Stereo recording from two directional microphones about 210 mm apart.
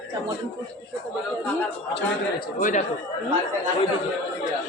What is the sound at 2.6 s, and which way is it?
Speech, 40° left (ahead or behind).